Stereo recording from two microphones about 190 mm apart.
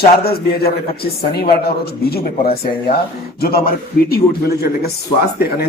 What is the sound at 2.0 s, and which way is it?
Speech, 55° left (ahead or behind).